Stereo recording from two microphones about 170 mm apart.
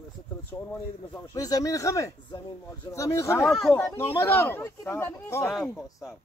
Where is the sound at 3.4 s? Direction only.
Centre (ahead or behind).